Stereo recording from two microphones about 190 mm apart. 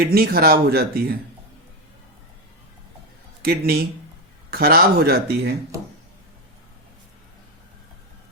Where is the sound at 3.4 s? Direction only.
55° right (ahead or behind).